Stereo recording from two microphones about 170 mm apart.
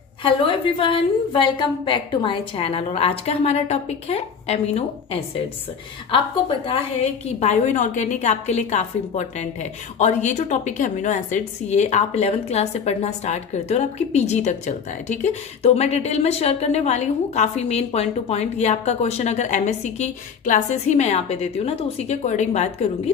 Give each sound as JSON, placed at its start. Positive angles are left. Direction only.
{"t": 0.2, "sound": "a woman's voice", "side_deg": 30}
{"t": 7.2, "sound": "a woman's voice", "side_deg": 40}